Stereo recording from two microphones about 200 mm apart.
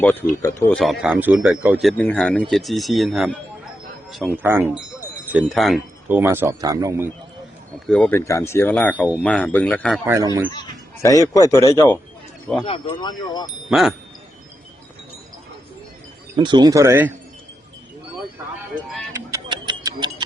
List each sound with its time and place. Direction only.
0.0 s speech: 10° left (ahead or behind); by 7.1 s 15° right (ahead or behind)
7.9 s speech: 5° left (ahead or behind)
10.1 s speech: 20° right (ahead or behind)
10.5 s speech: 20° left (ahead or behind)
12.9 s speech: 20° left (ahead or behind)
13.7 s speech: centre (ahead or behind)
16.3 s speech: 20° right (ahead or behind)
19.3 s a sound: 20° right (ahead or behind)